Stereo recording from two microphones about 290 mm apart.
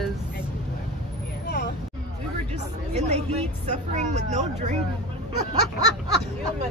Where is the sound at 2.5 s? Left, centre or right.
Right.